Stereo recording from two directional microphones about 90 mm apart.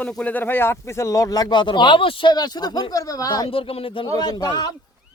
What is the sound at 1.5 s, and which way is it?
Speech, 60° left (ahead or behind).